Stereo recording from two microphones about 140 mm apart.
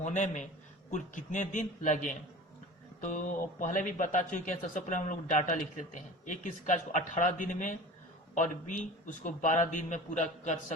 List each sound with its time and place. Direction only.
0.0 s speech: 60° left (ahead or behind)